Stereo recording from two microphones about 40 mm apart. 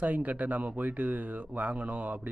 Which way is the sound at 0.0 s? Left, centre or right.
Right.